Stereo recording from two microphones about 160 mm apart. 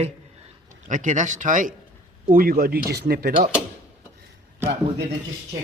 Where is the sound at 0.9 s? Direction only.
50° right (ahead or behind).